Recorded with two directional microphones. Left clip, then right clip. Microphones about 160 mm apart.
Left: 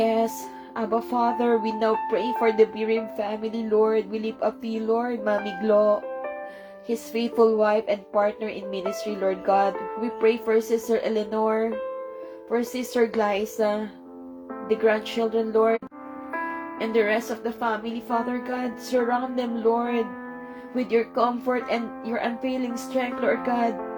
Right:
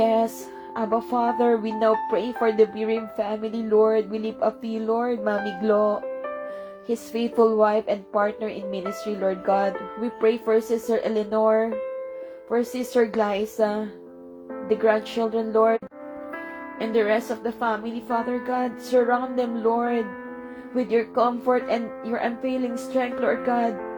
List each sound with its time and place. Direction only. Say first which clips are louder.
0.0 s music: right 2 dB; 35° right (ahead or behind)
0.9 s speech: even; 35° right (ahead or behind)
16.8 s speech: right 1 dB; 35° right (ahead or behind)